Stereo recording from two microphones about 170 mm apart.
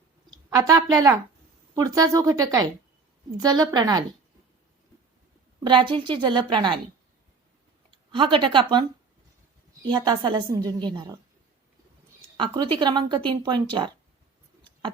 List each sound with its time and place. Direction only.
0.3 s a woman's voice: 25° right (ahead or behind)
5.6 s speech: 30° right (ahead or behind)
7.9 s speech: 30° right (ahead or behind)
9.8 s speech: 25° right (ahead or behind)
12.4 s speech: 30° right (ahead or behind)